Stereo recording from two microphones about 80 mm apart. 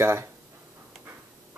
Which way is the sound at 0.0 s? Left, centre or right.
Right.